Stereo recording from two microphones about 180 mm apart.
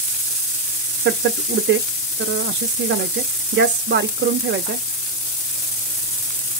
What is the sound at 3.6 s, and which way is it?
Speech, 75° right (ahead or behind).